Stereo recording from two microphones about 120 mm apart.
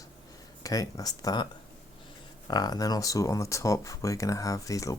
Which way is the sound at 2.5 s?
35° left (ahead or behind).